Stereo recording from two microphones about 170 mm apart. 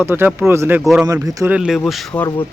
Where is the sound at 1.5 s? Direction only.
5° right (ahead or behind).